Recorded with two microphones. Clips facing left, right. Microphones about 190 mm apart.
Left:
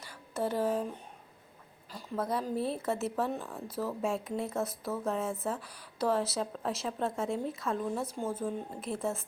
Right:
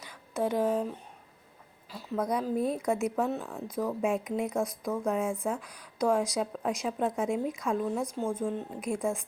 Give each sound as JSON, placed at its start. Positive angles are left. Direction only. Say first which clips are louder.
{"t": 0.3, "sound": "speech", "louder": "right 3 dB", "side_deg": -10}
{"t": 0.6, "sound": "speech", "louder": "right 2 dB", "side_deg": 10}
{"t": 1.9, "sound": "a sound", "louder": "right 3 dB", "side_deg": -10}
{"t": 2.1, "sound": "a woman's voice", "louder": "right 3 dB", "side_deg": 0}
{"t": 4.0, "sound": "speech", "louder": "right 4 dB", "side_deg": -15}
{"t": 5.5, "sound": "speech", "louder": "right 3 dB", "side_deg": 5}
{"t": 6.1, "sound": "speech", "louder": "right 3 dB", "side_deg": -15}
{"t": 7.6, "sound": "a woman's voice", "louder": "right 3 dB", "side_deg": 0}
{"t": 8.8, "sound": "speech", "louder": "right 4 dB", "side_deg": -15}